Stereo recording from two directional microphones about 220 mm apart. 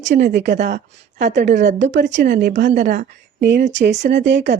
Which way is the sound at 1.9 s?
55° right (ahead or behind).